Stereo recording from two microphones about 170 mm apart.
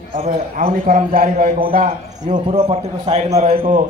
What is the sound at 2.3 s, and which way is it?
A man's voice, 35° right (ahead or behind).